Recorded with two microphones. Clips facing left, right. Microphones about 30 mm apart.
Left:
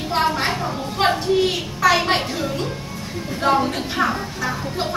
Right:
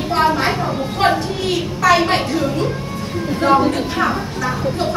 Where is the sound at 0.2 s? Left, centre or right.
Centre.